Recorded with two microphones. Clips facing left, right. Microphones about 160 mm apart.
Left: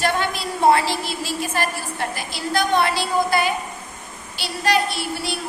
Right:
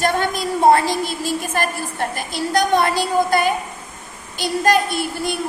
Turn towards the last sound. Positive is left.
turn(degrees=-50)  # may be behind; listen again after turning